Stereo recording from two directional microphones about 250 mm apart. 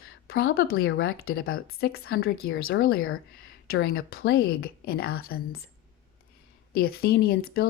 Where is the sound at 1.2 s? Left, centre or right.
Left.